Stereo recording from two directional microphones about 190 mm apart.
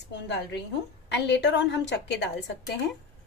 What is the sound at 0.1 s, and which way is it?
A woman's voice, 65° left (ahead or behind).